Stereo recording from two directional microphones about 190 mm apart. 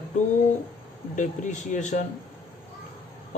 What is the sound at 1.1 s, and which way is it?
Speech, 40° left (ahead or behind).